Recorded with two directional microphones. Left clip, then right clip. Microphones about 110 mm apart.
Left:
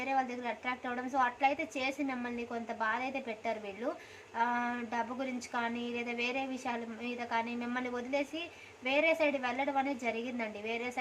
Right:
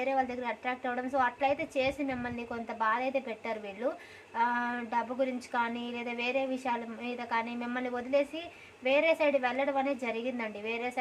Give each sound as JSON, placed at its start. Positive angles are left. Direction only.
{"t": 0.0, "sound": "a woman's voice", "side_deg": -30}